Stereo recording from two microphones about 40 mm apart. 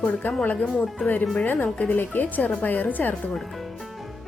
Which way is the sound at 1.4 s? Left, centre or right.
Left.